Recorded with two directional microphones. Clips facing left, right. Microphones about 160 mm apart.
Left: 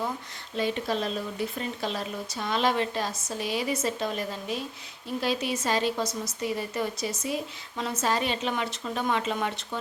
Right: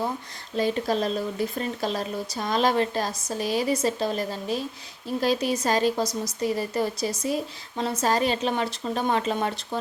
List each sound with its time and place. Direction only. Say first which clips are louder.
0.5 s speech: right 4 dB; 40° right (ahead or behind)